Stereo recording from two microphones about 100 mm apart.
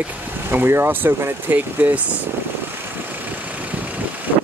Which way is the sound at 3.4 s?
15° right (ahead or behind).